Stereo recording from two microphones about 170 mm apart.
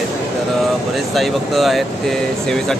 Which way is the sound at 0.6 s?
Centre (ahead or behind).